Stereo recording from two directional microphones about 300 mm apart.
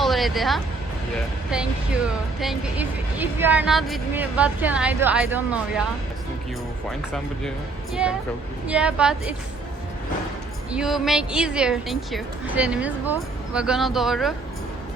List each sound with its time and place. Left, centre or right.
0.0 s music: centre
2.0 s a woman's voice: centre
8.6 s a woman's voice: centre
10.7 s a woman's voice: centre